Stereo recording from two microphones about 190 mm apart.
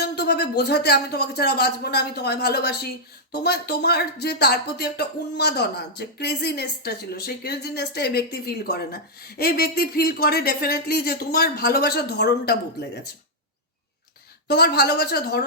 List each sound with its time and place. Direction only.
0.0 s speech: 60° left (ahead or behind)
14.4 s speech: 60° left (ahead or behind)